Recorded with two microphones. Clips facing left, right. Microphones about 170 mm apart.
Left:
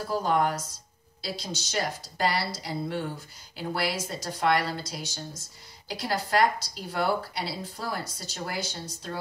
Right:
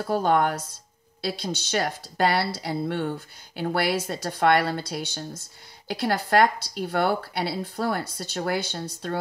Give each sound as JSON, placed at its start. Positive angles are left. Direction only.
{"t": 0.1, "sound": "speech", "side_deg": -60}